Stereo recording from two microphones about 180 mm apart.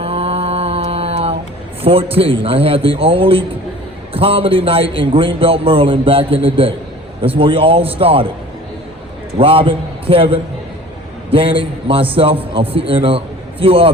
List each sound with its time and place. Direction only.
0.0 s mantra: 35° right (ahead or behind)
1.8 s a man's voice: 30° right (ahead or behind)
9.4 s a man's voice: 30° right (ahead or behind)